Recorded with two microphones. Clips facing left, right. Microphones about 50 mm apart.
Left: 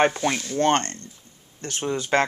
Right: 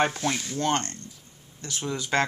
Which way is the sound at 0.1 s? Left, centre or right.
Centre.